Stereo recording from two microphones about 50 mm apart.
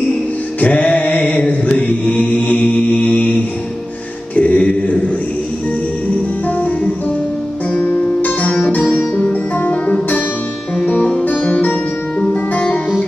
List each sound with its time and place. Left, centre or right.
0.6 s mantra: left
4.4 s mantra: left
7.7 s music: left